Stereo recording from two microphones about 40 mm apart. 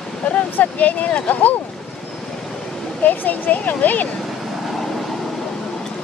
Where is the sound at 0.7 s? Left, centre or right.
Left.